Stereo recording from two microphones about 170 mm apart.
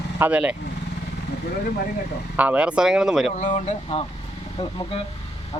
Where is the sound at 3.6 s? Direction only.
40° left (ahead or behind).